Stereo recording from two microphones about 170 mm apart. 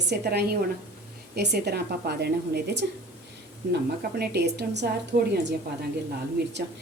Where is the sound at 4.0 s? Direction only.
70° right (ahead or behind).